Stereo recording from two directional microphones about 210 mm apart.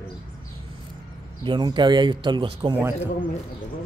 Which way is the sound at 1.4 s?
20° right (ahead or behind).